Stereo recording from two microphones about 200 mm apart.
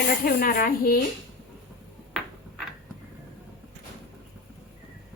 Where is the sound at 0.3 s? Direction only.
45° left (ahead or behind).